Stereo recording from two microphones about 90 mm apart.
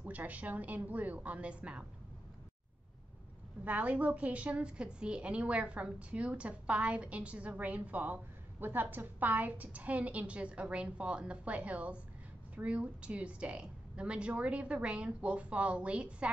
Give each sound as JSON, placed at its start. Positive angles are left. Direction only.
{"t": 0.0, "sound": "a woman's voice", "side_deg": -20}
{"t": 3.6, "sound": "a woman's voice", "side_deg": -15}